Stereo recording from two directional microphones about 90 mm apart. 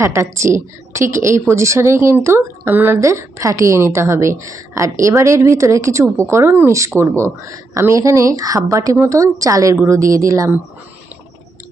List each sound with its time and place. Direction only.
0.0 s a woman's voice: 30° right (ahead or behind)